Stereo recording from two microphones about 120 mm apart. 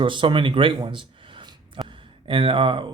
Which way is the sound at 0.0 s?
45° right (ahead or behind).